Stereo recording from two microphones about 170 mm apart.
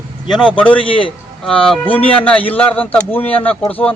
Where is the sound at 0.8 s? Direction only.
30° left (ahead or behind).